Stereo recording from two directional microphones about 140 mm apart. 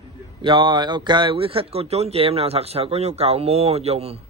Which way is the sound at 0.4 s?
35° right (ahead or behind).